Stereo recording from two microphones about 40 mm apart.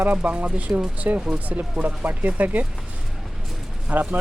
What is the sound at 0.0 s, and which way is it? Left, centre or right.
Speech, right.